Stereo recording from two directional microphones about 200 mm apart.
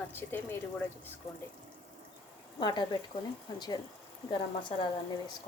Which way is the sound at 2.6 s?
20° left (ahead or behind).